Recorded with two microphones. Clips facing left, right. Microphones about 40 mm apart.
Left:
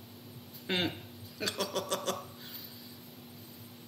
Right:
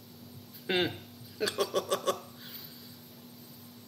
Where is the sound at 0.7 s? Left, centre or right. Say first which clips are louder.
Right 3 dB; centre.